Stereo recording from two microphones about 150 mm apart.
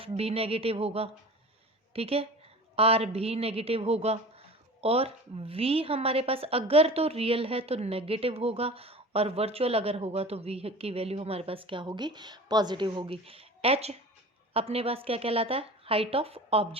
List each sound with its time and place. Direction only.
0.2 s a woman's voice: 40° right (ahead or behind)